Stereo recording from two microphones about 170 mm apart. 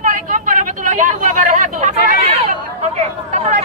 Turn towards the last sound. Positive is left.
turn(degrees=-40)  # may be behind; listen again after turning